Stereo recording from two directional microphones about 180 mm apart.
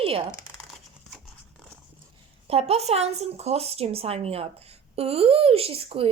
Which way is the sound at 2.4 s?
35° right (ahead or behind).